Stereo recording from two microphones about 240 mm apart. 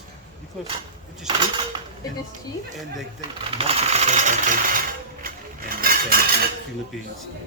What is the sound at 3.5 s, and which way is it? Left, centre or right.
Sewing machine, right.